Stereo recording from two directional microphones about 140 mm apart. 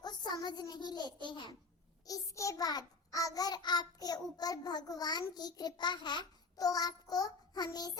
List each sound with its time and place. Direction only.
0.0 s a child's voice: 30° left (ahead or behind)
2.0 s child singing: 25° left (ahead or behind)